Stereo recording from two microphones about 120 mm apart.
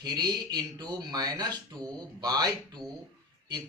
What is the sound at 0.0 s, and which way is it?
Speech, 35° right (ahead or behind).